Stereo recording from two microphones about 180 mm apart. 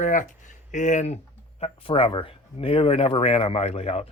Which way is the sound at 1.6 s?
30° left (ahead or behind).